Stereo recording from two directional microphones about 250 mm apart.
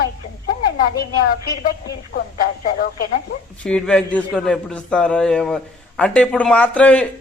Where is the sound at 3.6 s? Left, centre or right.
Centre.